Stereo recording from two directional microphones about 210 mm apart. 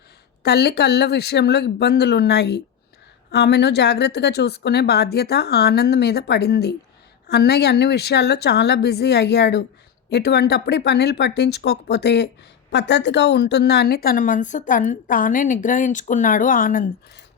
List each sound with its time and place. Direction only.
0.4 s a woman's voice: 50° left (ahead or behind)